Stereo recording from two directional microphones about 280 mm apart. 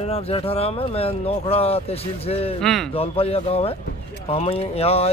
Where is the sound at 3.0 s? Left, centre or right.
Left.